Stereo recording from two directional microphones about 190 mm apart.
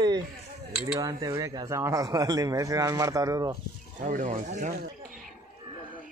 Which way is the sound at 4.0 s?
40° right (ahead or behind).